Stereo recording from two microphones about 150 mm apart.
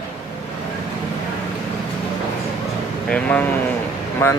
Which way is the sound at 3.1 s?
10° left (ahead or behind).